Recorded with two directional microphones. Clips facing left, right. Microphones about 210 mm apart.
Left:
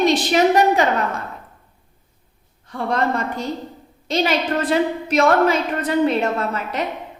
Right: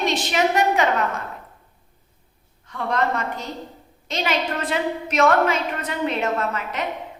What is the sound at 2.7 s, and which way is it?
A woman's voice, 35° left (ahead or behind).